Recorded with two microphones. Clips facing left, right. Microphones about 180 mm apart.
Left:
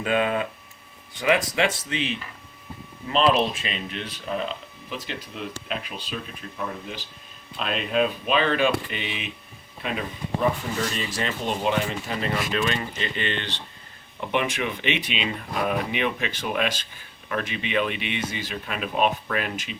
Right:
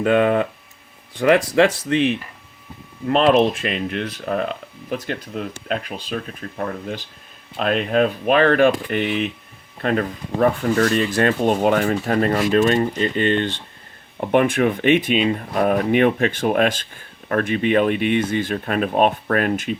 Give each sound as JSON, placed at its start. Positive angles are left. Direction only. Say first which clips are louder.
{"t": 0.0, "sound": "speech", "louder": "right 7 dB", "side_deg": -55}